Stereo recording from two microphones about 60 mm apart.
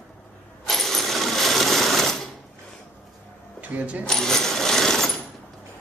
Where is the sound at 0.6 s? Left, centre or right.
Centre.